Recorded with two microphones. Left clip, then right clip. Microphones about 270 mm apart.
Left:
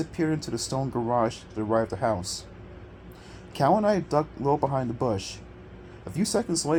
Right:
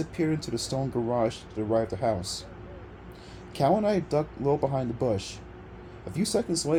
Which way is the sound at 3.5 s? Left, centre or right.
Left.